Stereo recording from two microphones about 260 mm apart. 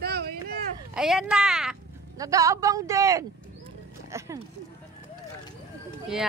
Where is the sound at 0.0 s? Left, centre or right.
Right.